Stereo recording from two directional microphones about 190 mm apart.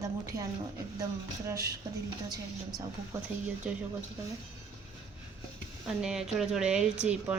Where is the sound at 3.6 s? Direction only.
5° right (ahead or behind).